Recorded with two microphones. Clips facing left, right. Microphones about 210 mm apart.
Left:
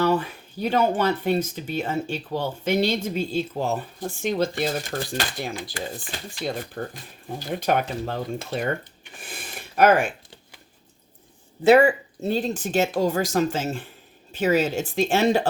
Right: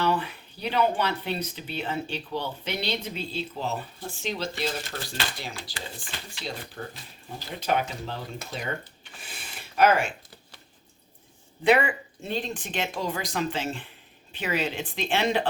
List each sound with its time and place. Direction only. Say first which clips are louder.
0.0 s speech: left 5 dB; 45° left (ahead or behind)
9.2 s a sound: left 6 dB; 50° left (ahead or behind)
11.6 s speech: left 7 dB; 40° left (ahead or behind)